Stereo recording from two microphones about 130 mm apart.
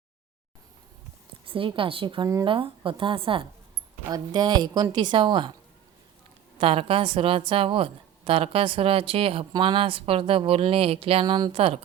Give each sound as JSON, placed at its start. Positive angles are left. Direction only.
{"t": 1.5, "sound": "a woman's voice", "side_deg": -40}
{"t": 6.6, "sound": "a woman's voice", "side_deg": -45}